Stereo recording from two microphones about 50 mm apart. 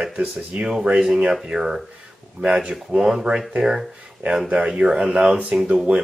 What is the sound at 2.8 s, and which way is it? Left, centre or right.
Speech, centre.